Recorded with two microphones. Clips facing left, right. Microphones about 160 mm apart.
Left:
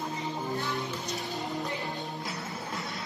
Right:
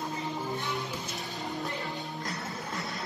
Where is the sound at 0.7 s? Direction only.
Centre (ahead or behind).